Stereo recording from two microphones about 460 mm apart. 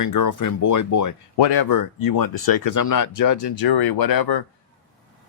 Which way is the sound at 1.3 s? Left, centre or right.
Left.